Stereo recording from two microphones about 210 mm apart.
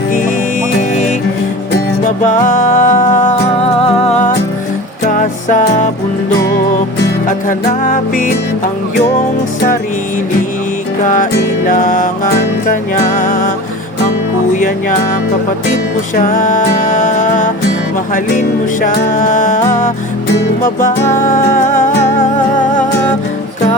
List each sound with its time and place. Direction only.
0.8 s music: 35° left (ahead or behind)
7.3 s music: 40° left (ahead or behind)
11.0 s music: 40° left (ahead or behind)
14.5 s music: 40° left (ahead or behind)
16.1 s music: 40° left (ahead or behind)
18.8 s music: 40° left (ahead or behind)
21.2 s music: 40° left (ahead or behind)